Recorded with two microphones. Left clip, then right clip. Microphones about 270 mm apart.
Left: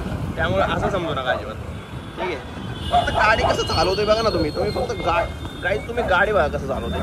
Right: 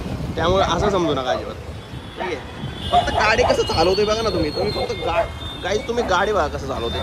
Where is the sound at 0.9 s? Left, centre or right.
Centre.